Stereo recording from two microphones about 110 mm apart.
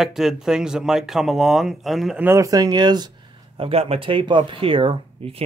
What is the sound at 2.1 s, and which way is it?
Speech, 25° right (ahead or behind).